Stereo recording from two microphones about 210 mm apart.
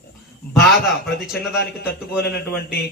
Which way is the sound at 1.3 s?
50° left (ahead or behind).